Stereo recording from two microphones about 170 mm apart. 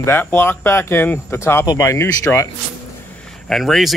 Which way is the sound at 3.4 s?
Centre (ahead or behind).